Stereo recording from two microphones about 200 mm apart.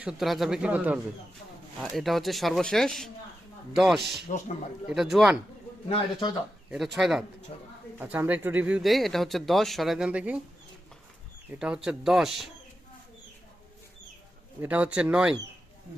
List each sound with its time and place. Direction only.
0.0 s speech: centre (ahead or behind)
5.9 s speech: 25° left (ahead or behind)
6.7 s speech: centre (ahead or behind)
7.5 s speech: 30° left (ahead or behind)
7.9 s speech: 10° right (ahead or behind)
11.6 s speech: 5° right (ahead or behind)
14.6 s speech: 5° right (ahead or behind)